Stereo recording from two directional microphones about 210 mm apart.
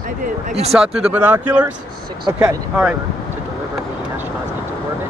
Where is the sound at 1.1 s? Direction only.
10° right (ahead or behind).